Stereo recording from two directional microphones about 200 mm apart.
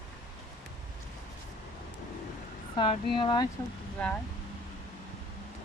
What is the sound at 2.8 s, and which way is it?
Speech, 25° left (ahead or behind).